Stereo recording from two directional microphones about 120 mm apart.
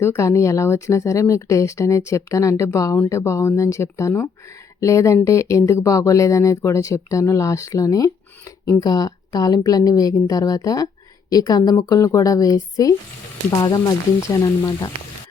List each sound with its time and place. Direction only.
0.0 s a woman's voice: 25° left (ahead or behind)